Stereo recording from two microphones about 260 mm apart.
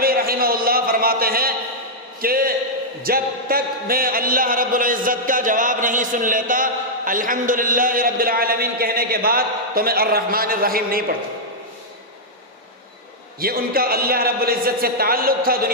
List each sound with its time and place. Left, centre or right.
0.0 s a sound: right
2.2 s a man's voice: right
13.4 s a man's voice: right